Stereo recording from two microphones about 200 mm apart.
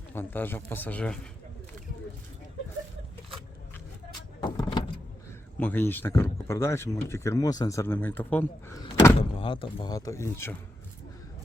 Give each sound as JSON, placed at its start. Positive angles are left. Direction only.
{"t": 0.1, "sound": "speech", "side_deg": 10}
{"t": 4.4, "sound": "vehicle", "side_deg": 20}
{"t": 5.5, "sound": "speech", "side_deg": 10}
{"t": 8.8, "sound": "speech", "side_deg": 25}